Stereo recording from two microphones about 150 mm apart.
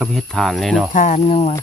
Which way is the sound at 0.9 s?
55° left (ahead or behind).